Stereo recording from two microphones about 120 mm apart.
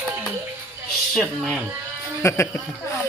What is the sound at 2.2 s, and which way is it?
Speech, 20° left (ahead or behind).